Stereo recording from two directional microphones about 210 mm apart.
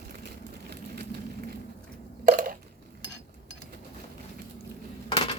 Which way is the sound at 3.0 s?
60° left (ahead or behind).